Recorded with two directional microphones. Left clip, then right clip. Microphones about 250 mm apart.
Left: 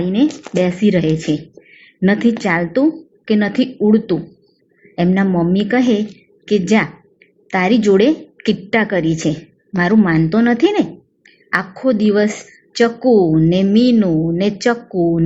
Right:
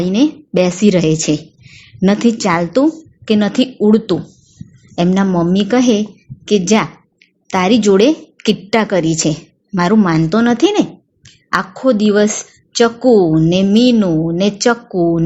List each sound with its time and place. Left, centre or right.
0.0 s a woman's voice: right